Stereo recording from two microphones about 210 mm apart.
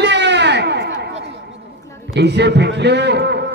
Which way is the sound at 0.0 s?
55° right (ahead or behind).